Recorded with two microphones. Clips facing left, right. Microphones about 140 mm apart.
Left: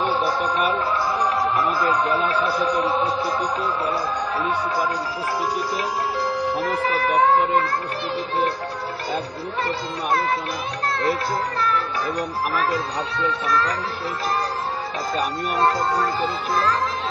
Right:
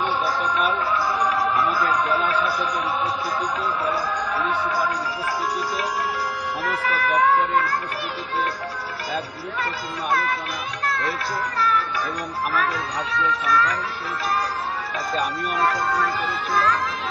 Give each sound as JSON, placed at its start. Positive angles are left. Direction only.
{"t": 0.0, "sound": "a sound", "side_deg": 30}
{"t": 0.9, "sound": "run", "side_deg": 25}
{"t": 1.8, "sound": "a man's voice", "side_deg": 30}
{"t": 6.6, "sound": "speech", "side_deg": 30}
{"t": 10.9, "sound": "speech", "side_deg": 25}
{"t": 12.5, "sound": "a man's voice", "side_deg": 25}
{"t": 15.5, "sound": "a man's voice", "side_deg": 25}